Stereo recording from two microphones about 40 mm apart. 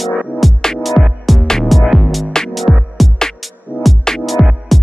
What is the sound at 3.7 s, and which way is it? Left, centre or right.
Music, left.